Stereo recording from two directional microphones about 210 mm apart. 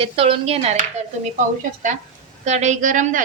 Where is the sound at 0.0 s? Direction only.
25° right (ahead or behind).